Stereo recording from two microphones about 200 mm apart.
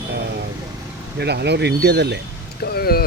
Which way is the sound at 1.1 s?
55° right (ahead or behind).